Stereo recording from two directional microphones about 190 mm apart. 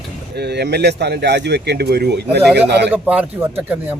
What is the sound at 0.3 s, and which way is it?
A man's voice, 60° right (ahead or behind).